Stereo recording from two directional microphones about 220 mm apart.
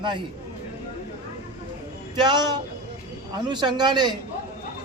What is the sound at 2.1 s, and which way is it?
A man's voice, 20° right (ahead or behind).